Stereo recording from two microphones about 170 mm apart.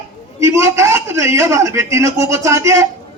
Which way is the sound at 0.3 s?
15° right (ahead or behind).